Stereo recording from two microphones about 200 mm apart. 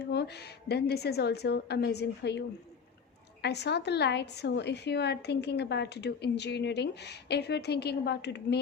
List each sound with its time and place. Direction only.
0.0 s a woman's voice: 55° left (ahead or behind)
3.4 s a woman's voice: 55° left (ahead or behind)